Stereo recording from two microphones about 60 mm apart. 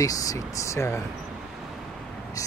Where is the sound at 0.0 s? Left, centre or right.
Left.